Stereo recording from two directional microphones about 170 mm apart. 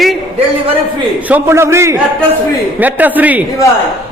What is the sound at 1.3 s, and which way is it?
A man's voice, 15° right (ahead or behind).